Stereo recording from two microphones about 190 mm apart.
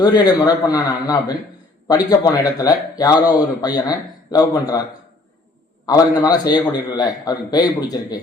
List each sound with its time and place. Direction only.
0.0 s a man's voice: 20° left (ahead or behind)
5.8 s a man's voice: 20° left (ahead or behind)